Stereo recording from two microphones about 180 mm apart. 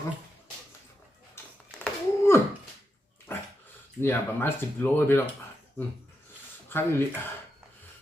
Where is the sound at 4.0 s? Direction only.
10° left (ahead or behind).